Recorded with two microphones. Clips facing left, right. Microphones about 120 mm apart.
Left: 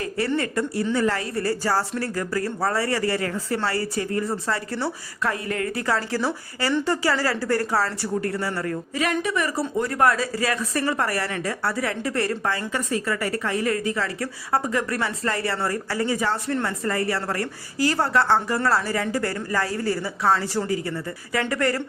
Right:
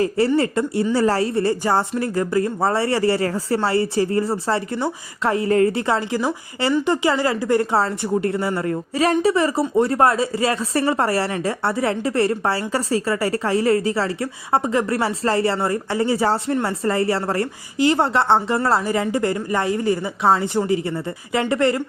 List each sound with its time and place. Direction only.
0.3 s speech: 25° right (ahead or behind)